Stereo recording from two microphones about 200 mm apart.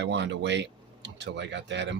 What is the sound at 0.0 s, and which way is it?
Speech, 60° right (ahead or behind).